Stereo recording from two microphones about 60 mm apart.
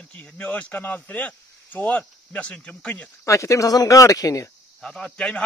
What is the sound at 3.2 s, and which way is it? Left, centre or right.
Speech, left.